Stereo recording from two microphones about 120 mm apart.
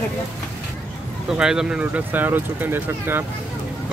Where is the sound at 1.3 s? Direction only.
5° right (ahead or behind).